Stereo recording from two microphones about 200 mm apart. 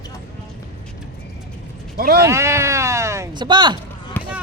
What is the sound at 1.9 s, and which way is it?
Speech, 50° right (ahead or behind).